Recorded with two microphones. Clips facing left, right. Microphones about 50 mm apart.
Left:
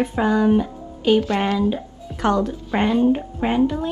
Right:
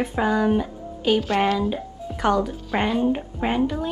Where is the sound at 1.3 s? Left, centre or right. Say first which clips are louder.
Left 1 dB; left.